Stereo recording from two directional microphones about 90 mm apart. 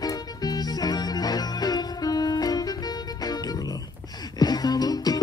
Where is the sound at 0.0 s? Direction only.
45° left (ahead or behind).